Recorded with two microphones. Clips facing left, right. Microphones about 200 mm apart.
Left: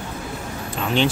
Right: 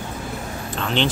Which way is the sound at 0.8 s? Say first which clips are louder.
Left 2 dB; 10° left (ahead or behind).